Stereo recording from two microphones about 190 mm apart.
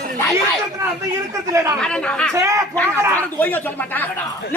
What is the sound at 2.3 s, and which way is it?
Speech, 15° right (ahead or behind).